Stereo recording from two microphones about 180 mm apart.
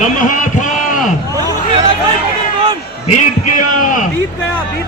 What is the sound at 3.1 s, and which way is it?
Speech, 45° left (ahead or behind).